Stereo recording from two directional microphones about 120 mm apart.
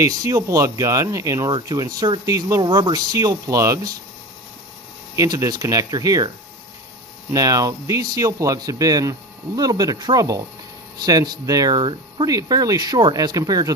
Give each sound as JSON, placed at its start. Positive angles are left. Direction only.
{"t": 0.0, "sound": "a man's voice", "side_deg": -30}
{"t": 5.1, "sound": "a man's voice", "side_deg": -25}
{"t": 7.3, "sound": "a man's voice", "side_deg": -30}